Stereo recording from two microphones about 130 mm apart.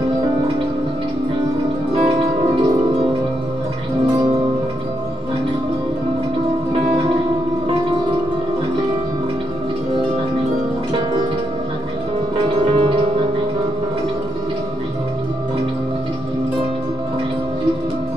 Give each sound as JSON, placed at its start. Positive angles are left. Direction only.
{"t": 12.4, "sound": "music", "side_deg": -40}